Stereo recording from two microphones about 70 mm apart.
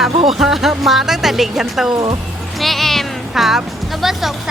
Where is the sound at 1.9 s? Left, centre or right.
Right.